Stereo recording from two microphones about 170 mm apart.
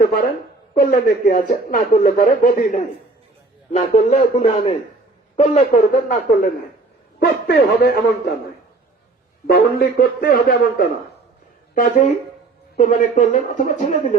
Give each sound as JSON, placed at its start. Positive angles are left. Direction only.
{"t": 0.0, "sound": "a woman's voice", "side_deg": 60}
{"t": 7.2, "sound": "a man's voice", "side_deg": 70}
{"t": 9.5, "sound": "a man's voice", "side_deg": 65}
{"t": 12.7, "sound": "speech", "side_deg": 50}